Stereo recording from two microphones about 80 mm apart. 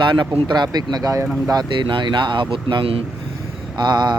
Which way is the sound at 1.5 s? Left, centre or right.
Right.